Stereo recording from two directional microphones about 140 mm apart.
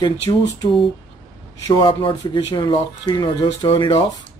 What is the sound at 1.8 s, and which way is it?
Speech, 35° left (ahead or behind).